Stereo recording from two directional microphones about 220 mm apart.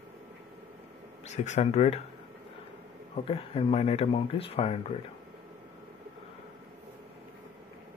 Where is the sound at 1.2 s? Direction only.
30° left (ahead or behind).